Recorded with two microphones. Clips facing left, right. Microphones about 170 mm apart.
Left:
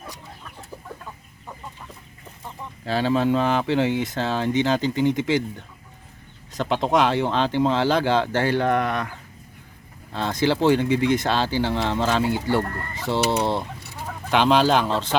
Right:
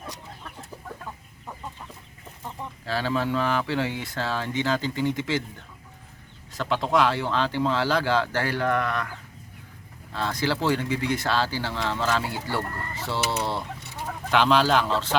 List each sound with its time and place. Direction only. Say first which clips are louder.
2.8 s speech: left 6 dB; 20° left (ahead or behind)
6.5 s speech: left 3 dB; 20° left (ahead or behind)
10.1 s speech: left 5 dB; 20° left (ahead or behind)